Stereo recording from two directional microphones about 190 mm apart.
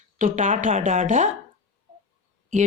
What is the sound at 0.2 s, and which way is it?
Speech, 40° right (ahead or behind).